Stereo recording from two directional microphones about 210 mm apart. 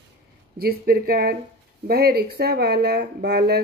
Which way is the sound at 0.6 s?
45° right (ahead or behind).